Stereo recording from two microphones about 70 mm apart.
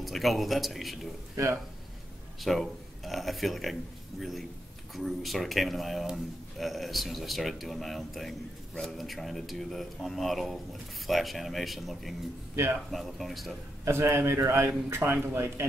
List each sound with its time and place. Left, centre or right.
0.0 s a man's voice: centre
1.3 s speech: right
2.4 s a man's voice: centre
13.8 s a man's voice: right